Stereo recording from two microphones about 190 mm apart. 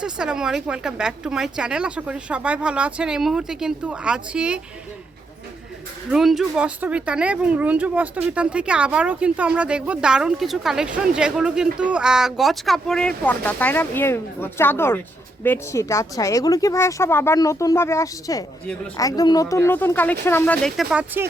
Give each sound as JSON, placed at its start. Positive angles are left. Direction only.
{"t": 0.0, "sound": "speech", "side_deg": -5}
{"t": 6.1, "sound": "speech", "side_deg": 0}